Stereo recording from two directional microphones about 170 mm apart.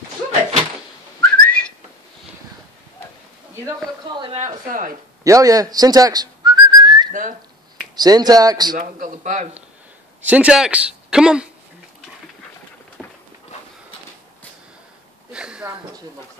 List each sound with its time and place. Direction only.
1.2 s whistling: 5° left (ahead or behind)
4.1 s speech: 30° right (ahead or behind)
4.6 s a man's voice: 50° right (ahead or behind)
5.2 s whistling: 20° right (ahead or behind)
7.1 s speech: 50° right (ahead or behind)
7.9 s speech: 25° right (ahead or behind)
8.7 s a man's voice: 50° right (ahead or behind)
10.2 s speech: 10° right (ahead or behind)
15.3 s a sound: 5° right (ahead or behind)